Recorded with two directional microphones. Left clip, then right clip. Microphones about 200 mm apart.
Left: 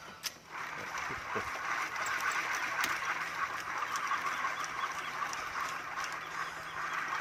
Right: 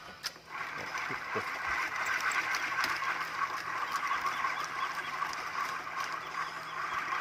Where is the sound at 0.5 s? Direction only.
20° right (ahead or behind).